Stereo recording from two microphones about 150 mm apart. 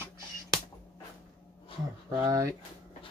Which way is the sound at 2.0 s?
25° right (ahead or behind).